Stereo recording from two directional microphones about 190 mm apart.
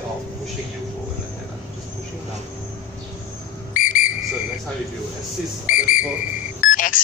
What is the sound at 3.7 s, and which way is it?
Whistle, 45° left (ahead or behind).